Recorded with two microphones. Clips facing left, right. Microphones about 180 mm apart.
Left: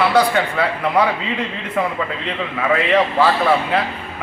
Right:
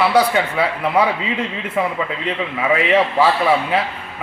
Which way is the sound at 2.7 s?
10° right (ahead or behind).